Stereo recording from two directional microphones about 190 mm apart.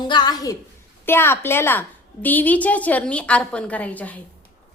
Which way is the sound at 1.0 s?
10° left (ahead or behind).